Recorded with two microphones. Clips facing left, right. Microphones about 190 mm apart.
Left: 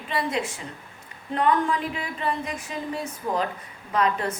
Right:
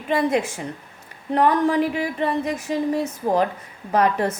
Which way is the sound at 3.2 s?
45° right (ahead or behind).